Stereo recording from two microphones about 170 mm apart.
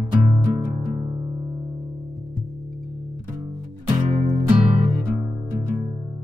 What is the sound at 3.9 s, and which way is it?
Music, 40° right (ahead or behind).